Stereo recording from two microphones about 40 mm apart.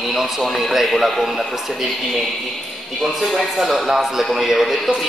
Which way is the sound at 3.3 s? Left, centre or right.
Centre.